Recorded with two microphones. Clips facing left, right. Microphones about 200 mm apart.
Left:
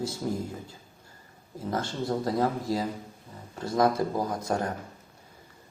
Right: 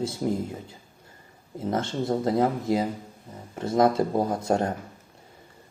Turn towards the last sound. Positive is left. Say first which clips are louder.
# right 5 dB
turn(degrees=-25)  # may be behind; listen again after turning